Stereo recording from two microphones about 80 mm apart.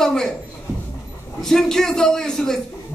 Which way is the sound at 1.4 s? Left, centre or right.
Centre.